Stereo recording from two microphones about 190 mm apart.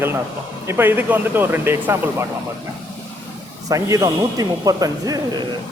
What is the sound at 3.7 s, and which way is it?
Speech, 15° right (ahead or behind).